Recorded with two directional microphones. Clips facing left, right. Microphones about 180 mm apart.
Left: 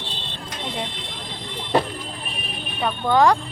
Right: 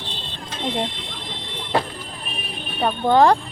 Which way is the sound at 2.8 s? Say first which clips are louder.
Right 2 dB; 25° right (ahead or behind).